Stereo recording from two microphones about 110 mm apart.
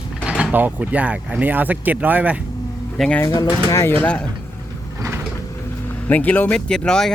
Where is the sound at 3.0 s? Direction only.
Centre (ahead or behind).